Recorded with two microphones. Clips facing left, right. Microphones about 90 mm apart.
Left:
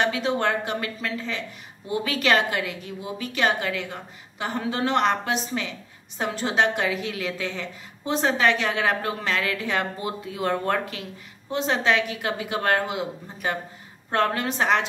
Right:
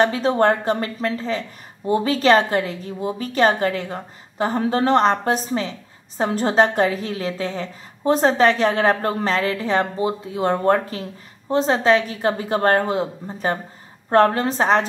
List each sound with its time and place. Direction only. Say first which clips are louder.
0.0 s a woman's voice: right 6 dB; 40° right (ahead or behind)